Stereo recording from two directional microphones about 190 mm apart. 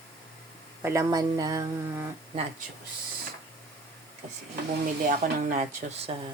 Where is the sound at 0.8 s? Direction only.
15° right (ahead or behind).